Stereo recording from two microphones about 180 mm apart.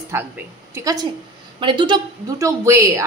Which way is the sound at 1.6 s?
25° right (ahead or behind).